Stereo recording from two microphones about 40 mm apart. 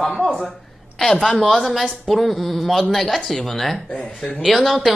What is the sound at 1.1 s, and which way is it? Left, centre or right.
Speech, centre.